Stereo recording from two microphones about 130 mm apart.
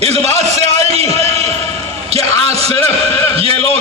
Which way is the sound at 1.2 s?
50° right (ahead or behind).